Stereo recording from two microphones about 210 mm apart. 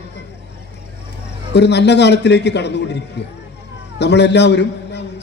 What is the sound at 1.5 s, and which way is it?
A man's voice, 55° left (ahead or behind).